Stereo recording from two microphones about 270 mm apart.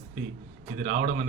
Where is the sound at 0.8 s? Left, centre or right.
Right.